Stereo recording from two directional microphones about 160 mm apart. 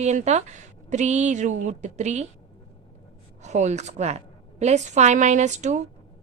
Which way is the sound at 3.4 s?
45° right (ahead or behind).